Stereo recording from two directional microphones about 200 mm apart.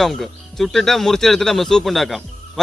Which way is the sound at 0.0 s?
Centre (ahead or behind).